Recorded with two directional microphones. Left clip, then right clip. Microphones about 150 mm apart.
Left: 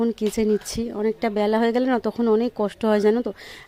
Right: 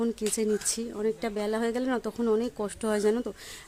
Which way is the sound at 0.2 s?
30° left (ahead or behind).